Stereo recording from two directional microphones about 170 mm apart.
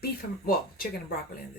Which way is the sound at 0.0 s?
60° left (ahead or behind).